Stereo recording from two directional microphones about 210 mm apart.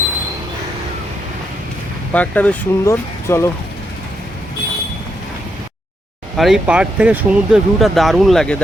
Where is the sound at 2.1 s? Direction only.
5° left (ahead or behind).